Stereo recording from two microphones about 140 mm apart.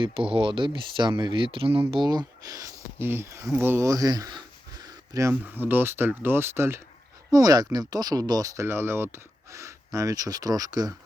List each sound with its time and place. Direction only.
0.0 s speech: 40° right (ahead or behind)